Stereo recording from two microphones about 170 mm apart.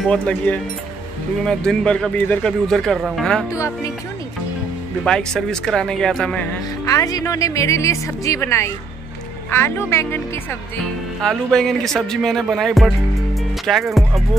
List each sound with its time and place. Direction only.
0.1 s a woman's voice: 5° left (ahead or behind)
3.5 s a woman's voice: 20° left (ahead or behind)
5.0 s speech: 5° left (ahead or behind)
6.9 s a woman's voice: 20° left (ahead or behind)
11.2 s speech: centre (ahead or behind)